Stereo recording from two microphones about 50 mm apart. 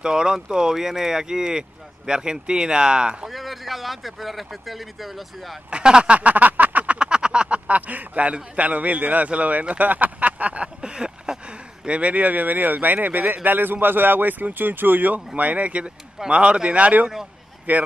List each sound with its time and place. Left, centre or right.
0.0 s speech: centre
3.3 s speech: centre
5.7 s a man's voice: centre
6.1 s a sound: right
7.0 s a man's voice: centre; by 17.8 s right